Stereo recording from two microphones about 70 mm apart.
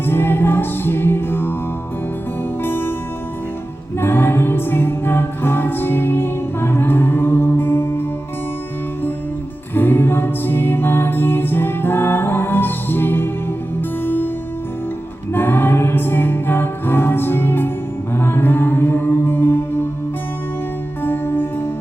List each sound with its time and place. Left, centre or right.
0.0 s music: left
2.6 s music: left
3.9 s music: left
9.7 s music: left
15.3 s music: left
21.0 s music: left